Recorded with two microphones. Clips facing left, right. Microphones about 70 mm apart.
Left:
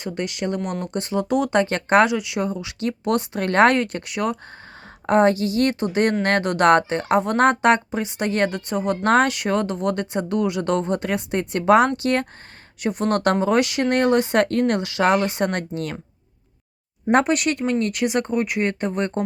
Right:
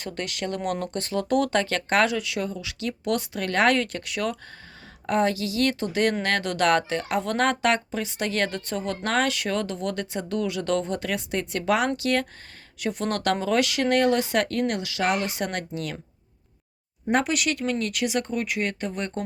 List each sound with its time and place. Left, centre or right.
0.0 s speech: centre
1.5 s speech: left
17.1 s speech: left